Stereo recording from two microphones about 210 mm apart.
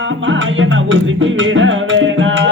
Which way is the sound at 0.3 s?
65° right (ahead or behind).